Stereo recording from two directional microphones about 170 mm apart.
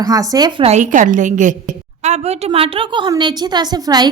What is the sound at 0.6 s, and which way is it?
A woman's voice, 40° right (ahead or behind).